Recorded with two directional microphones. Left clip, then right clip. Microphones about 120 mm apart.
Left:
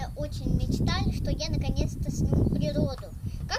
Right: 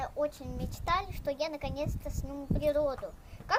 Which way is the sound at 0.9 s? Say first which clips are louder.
Right 6 dB; 35° left (ahead or behind).